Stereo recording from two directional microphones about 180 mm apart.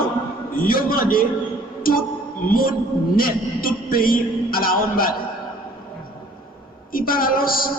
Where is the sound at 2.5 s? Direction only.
55° left (ahead or behind).